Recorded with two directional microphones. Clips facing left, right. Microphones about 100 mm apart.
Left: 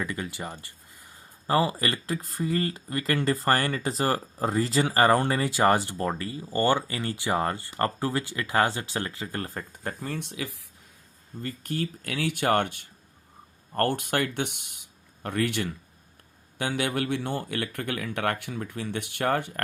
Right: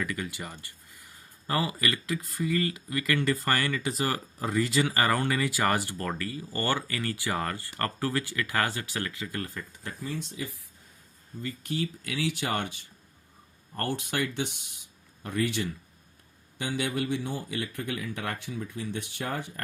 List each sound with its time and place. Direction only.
0.0 s speech: 25° left (ahead or behind); by 10.7 s 85° left
11.4 s speech: 50° left (ahead or behind); by 19.6 s 65° left (ahead or behind)